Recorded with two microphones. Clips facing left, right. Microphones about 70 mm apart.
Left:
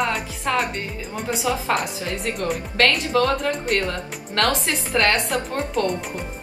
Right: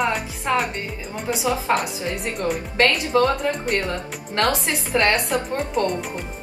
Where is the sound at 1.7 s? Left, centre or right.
Centre.